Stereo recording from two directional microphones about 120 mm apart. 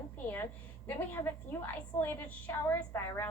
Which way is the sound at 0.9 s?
15° left (ahead or behind).